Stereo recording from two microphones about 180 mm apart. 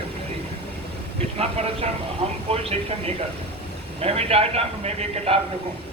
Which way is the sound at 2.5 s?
35° right (ahead or behind).